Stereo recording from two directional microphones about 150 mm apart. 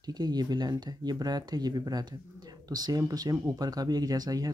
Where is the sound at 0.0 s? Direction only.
25° right (ahead or behind).